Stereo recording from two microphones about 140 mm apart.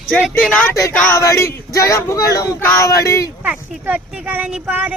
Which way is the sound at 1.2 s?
25° left (ahead or behind).